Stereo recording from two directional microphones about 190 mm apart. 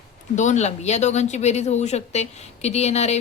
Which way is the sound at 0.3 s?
40° left (ahead or behind).